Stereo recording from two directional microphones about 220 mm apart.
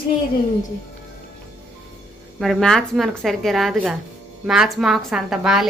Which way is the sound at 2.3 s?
Centre (ahead or behind).